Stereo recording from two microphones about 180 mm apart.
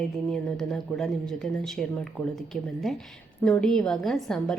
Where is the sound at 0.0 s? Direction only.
5° left (ahead or behind).